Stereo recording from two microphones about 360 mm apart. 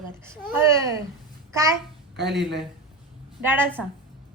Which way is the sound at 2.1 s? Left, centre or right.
Right.